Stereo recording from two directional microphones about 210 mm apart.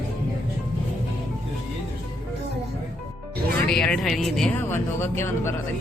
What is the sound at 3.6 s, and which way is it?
A man's voice, 5° left (ahead or behind).